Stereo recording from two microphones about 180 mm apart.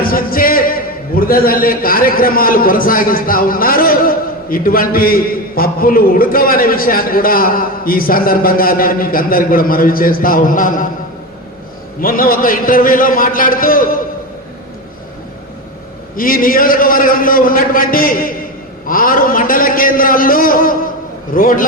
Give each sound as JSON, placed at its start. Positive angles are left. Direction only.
{"t": 0.1, "sound": "a man's voice", "side_deg": 55}
{"t": 11.9, "sound": "a man's voice", "side_deg": 50}
{"t": 16.1, "sound": "a man's voice", "side_deg": 50}